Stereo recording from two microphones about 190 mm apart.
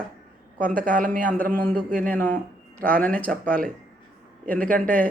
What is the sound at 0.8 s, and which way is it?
Speech, 45° right (ahead or behind).